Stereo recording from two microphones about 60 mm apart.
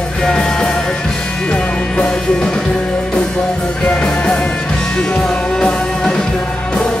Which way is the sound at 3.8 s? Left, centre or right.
Centre.